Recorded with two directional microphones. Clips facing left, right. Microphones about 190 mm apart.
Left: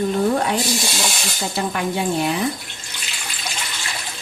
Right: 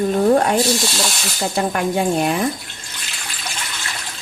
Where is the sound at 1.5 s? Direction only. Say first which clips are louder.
Right 4 dB; 50° right (ahead or behind).